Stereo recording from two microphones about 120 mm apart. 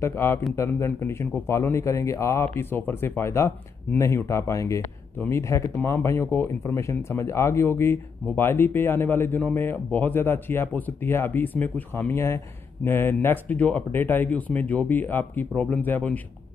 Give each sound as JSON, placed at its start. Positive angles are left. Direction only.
{"t": 0.0, "sound": "speech", "side_deg": 20}